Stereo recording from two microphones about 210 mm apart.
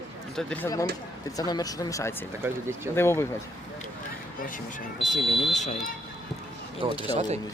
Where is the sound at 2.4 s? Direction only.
10° right (ahead or behind).